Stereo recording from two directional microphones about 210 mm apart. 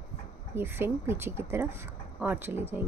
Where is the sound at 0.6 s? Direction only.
10° right (ahead or behind).